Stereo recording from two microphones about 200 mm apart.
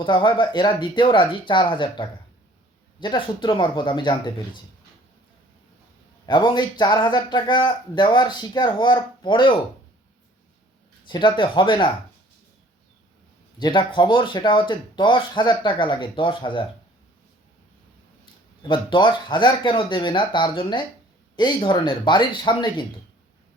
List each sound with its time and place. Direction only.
0.0 s speech: 25° left (ahead or behind)
6.2 s speech: 20° left (ahead or behind)
11.0 s speech: 25° left (ahead or behind)
13.6 s speech: 25° left (ahead or behind)
18.7 s speech: 25° left (ahead or behind)